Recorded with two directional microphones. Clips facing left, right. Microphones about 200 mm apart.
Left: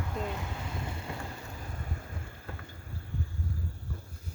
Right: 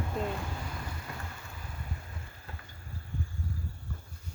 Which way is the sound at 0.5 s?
25° left (ahead or behind).